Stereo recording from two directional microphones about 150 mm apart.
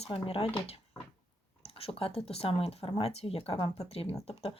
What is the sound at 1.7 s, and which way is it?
Speech, 40° left (ahead or behind).